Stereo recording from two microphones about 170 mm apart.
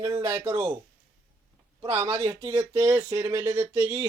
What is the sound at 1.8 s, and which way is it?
Speech, 15° right (ahead or behind).